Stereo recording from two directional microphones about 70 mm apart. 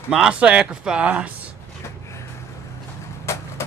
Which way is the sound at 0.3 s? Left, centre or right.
Centre.